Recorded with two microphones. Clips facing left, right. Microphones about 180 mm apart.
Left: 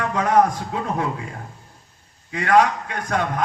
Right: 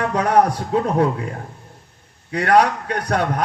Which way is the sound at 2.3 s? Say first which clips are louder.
Right 1 dB; 40° right (ahead or behind).